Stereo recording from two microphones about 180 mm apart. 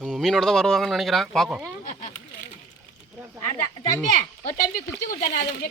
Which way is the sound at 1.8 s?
45° left (ahead or behind).